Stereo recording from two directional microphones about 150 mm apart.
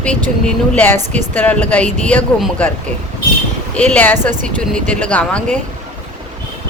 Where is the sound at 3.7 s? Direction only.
10° left (ahead or behind).